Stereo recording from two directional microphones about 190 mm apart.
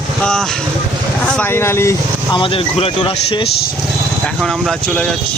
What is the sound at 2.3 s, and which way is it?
Speech, 30° left (ahead or behind).